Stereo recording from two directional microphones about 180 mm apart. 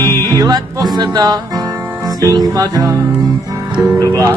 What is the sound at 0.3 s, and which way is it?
Music, 20° right (ahead or behind).